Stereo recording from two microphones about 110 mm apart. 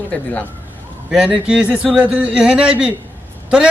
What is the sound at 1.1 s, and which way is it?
A man's voice, 10° right (ahead or behind).